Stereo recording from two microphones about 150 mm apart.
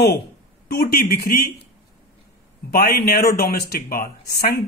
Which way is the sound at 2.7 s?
85° left.